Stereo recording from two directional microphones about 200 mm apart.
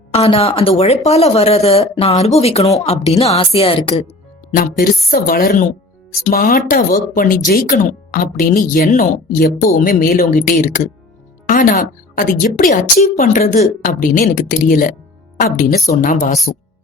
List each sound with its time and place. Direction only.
0.1 s a woman's voice: 30° left (ahead or behind)
4.5 s a woman's voice: 45° left (ahead or behind)